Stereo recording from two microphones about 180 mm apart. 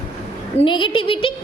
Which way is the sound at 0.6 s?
25° left (ahead or behind).